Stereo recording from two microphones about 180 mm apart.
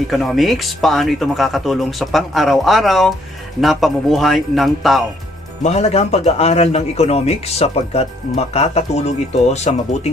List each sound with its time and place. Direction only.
0.1 s speech: centre (ahead or behind)
5.6 s a man's voice: 35° left (ahead or behind)